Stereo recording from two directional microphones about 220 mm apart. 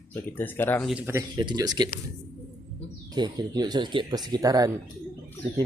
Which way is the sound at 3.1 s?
20° right (ahead or behind).